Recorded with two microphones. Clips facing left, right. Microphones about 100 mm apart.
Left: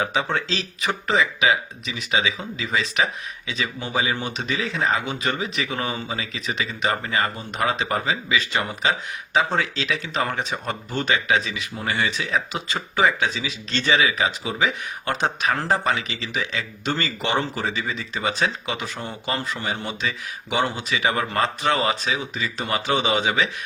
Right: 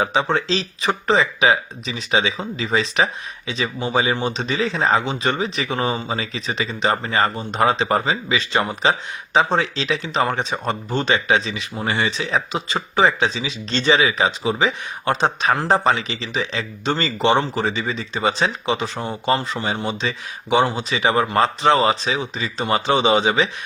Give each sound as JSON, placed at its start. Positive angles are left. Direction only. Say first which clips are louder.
{"t": 0.0, "sound": "speech", "louder": "right 4 dB", "side_deg": -25}